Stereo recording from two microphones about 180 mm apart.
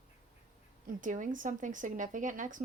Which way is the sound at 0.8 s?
45° right (ahead or behind).